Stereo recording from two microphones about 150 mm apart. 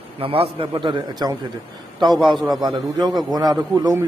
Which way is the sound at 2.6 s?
25° right (ahead or behind).